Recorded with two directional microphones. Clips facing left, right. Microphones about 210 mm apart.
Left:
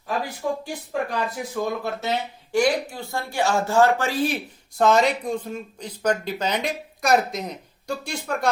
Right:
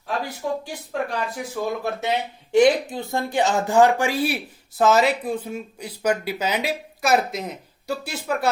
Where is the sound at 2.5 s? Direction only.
20° right (ahead or behind).